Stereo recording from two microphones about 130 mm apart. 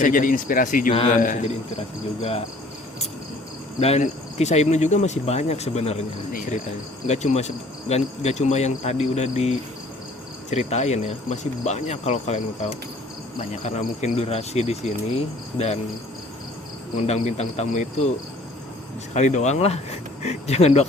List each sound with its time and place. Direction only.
0.0 s speech: 90° left
1.1 s a man's voice: 80° left
3.8 s cricket: 55° left (ahead or behind)
4.0 s speech: 60° left (ahead or behind)
7.1 s speech: 60° left (ahead or behind)
13.5 s speech: 60° left (ahead or behind)
17.0 s speech: 55° left (ahead or behind)
19.1 s speech: 65° left (ahead or behind)